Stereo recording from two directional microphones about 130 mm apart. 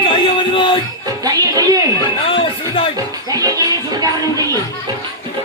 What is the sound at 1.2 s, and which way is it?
Music, 25° right (ahead or behind).